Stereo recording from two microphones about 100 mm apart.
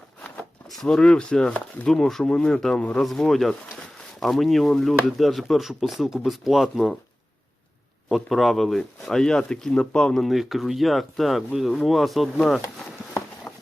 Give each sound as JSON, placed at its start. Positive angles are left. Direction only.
{"t": 0.7, "sound": "speech", "side_deg": 5}
{"t": 8.1, "sound": "speech", "side_deg": 0}